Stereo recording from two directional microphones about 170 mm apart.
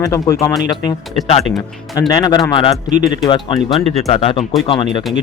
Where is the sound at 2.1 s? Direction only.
25° left (ahead or behind).